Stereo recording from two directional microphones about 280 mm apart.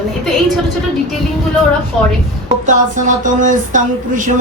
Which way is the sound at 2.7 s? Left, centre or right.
Right.